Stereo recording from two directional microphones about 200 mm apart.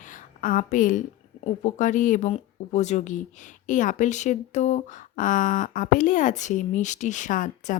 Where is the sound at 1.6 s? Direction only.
40° left (ahead or behind).